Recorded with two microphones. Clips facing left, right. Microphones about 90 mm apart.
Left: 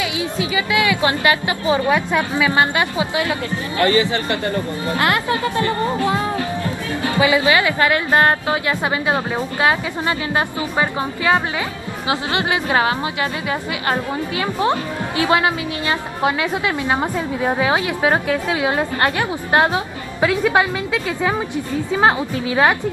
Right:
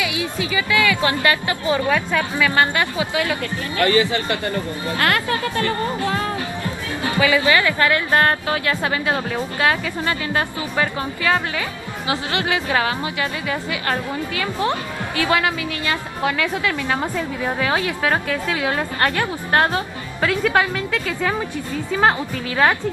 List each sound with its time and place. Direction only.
0.0 s a woman's voice: 25° left (ahead or behind)
7.1 s a woman's voice: 20° left (ahead or behind)